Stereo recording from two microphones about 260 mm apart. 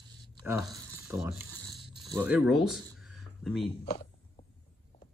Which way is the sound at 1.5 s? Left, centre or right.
Centre.